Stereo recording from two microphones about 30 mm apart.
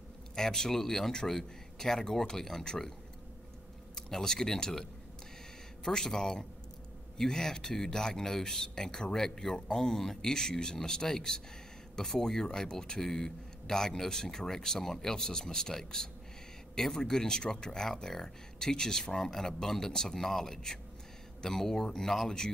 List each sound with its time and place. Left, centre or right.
0.4 s speech: centre
3.9 s speech: centre
5.9 s speech: centre